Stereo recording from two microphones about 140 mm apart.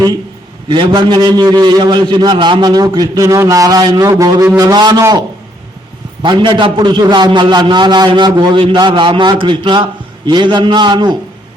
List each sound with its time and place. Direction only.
0.7 s a man's voice: 35° right (ahead or behind)
6.2 s a man's voice: 35° right (ahead or behind)